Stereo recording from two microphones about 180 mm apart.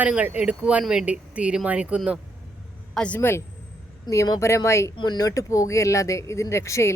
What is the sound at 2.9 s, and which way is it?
Speech, 5° left (ahead or behind).